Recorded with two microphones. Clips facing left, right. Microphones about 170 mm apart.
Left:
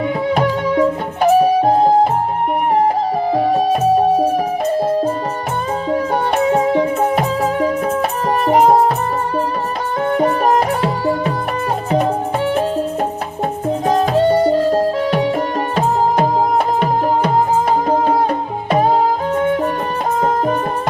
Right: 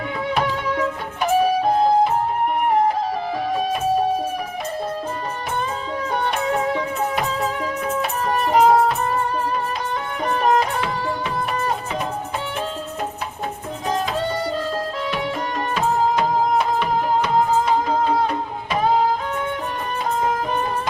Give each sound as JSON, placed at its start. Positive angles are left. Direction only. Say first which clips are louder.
{"t": 0.3, "sound": "music", "louder": "left 6 dB", "side_deg": 40}
{"t": 3.3, "sound": "music", "louder": "left 9 dB", "side_deg": 35}
{"t": 5.9, "sound": "music", "louder": "left 8 dB", "side_deg": 40}
{"t": 10.2, "sound": "music", "louder": "left 3 dB", "side_deg": 40}
{"t": 13.8, "sound": "music", "louder": "left 9 dB", "side_deg": 45}
{"t": 20.2, "sound": "music", "louder": "left 8 dB", "side_deg": 45}